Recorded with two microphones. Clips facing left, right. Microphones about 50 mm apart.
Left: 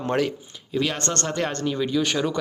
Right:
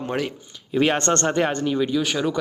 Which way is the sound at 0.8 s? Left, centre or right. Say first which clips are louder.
Right 6 dB; right.